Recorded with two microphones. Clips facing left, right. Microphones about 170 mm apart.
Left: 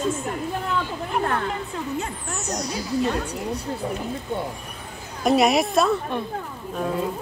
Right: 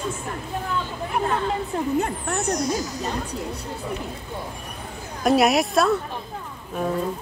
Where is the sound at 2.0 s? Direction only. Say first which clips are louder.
Right 6 dB; 60° right (ahead or behind); by 3.1 s 45° right (ahead or behind).